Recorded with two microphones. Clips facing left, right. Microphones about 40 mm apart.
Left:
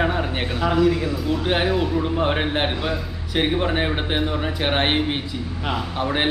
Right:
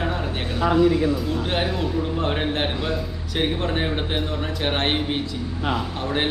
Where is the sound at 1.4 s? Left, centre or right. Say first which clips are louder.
Left 6 dB; centre.